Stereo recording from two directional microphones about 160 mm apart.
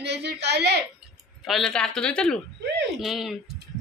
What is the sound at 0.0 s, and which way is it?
Speech, 90° right.